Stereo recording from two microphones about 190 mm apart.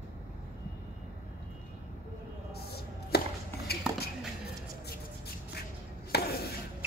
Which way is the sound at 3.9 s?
5° right (ahead or behind).